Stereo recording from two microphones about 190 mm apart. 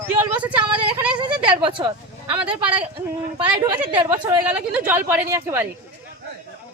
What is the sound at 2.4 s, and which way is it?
A woman's voice, 5° right (ahead or behind).